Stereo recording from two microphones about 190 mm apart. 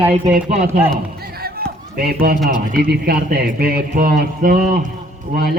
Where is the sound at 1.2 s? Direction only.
55° right (ahead or behind).